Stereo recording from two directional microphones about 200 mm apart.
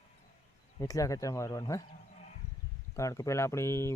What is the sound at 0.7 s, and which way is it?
Speech, 15° left (ahead or behind).